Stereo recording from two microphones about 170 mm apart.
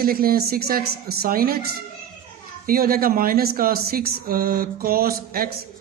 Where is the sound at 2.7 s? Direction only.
60° right (ahead or behind).